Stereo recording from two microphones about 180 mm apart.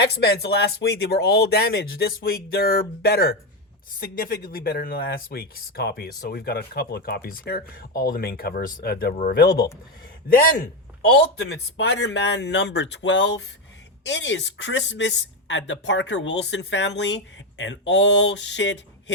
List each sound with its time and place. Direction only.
0.0 s speech: 65° left (ahead or behind)
11.1 s speech: 65° left (ahead or behind); by 19.1 s 85° left